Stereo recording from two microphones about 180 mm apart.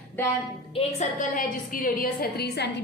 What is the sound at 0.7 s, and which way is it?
A woman's voice, 40° left (ahead or behind).